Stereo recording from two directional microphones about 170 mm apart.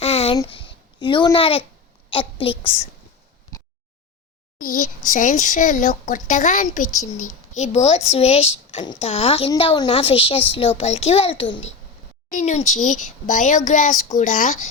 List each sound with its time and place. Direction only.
0.0 s a sound: 35° left (ahead or behind)
0.3 s a child's voice: 30° left (ahead or behind)
4.5 s a woman's voice: 55° left (ahead or behind); by 11.6 s 30° left (ahead or behind)
12.3 s speech: 45° left (ahead or behind)